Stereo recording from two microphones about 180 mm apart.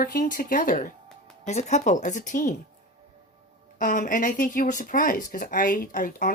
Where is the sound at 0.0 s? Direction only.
55° left (ahead or behind).